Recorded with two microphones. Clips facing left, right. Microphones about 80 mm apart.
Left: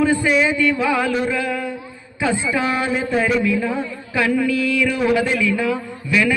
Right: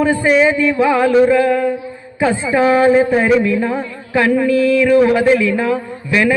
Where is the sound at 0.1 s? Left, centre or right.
Right.